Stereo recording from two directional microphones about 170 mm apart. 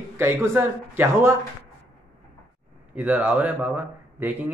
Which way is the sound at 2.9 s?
10° right (ahead or behind).